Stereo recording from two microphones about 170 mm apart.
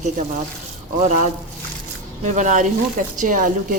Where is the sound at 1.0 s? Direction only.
45° right (ahead or behind).